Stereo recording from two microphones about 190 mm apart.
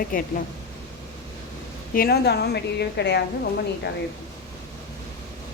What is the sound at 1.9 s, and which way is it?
A woman's voice, 55° left (ahead or behind).